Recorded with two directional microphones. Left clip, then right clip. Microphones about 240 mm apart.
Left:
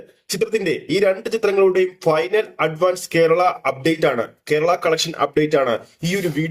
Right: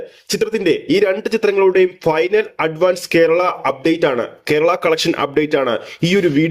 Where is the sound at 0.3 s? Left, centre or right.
Right.